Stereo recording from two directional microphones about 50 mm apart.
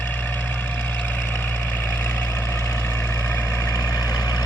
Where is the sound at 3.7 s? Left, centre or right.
Left.